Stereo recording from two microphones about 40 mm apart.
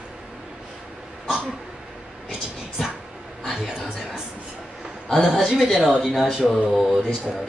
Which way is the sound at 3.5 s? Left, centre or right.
Centre.